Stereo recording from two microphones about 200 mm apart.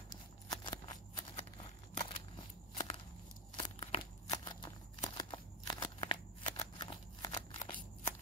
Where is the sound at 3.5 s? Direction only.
25° left (ahead or behind).